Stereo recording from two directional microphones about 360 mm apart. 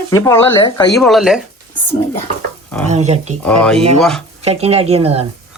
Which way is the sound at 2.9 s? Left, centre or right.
Centre.